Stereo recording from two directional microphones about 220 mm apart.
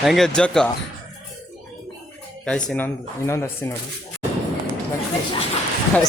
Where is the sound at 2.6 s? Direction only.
10° left (ahead or behind).